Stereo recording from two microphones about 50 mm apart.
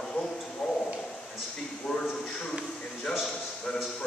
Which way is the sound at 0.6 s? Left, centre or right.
Centre.